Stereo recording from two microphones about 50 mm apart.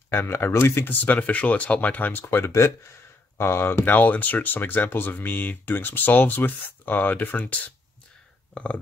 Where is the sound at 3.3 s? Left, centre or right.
Left.